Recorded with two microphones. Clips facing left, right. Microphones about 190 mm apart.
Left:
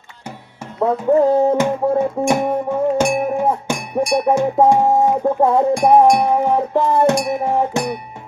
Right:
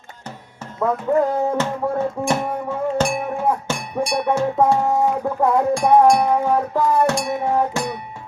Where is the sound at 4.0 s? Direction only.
30° left (ahead or behind).